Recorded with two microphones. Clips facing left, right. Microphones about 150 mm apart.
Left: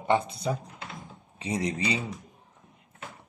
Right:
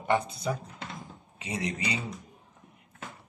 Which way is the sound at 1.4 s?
35° left (ahead or behind).